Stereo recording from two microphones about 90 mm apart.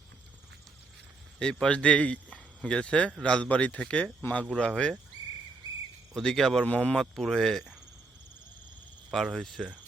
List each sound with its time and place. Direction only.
1.4 s speech: 10° left (ahead or behind)
6.1 s speech: 5° left (ahead or behind)
9.1 s speech: centre (ahead or behind)